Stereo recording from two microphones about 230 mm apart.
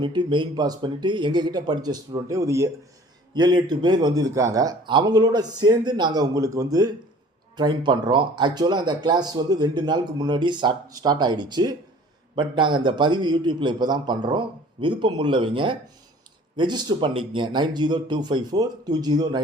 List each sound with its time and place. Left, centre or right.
0.0 s a man's voice: centre